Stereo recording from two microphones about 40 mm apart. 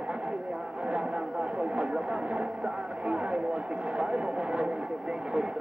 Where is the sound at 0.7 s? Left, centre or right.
Right.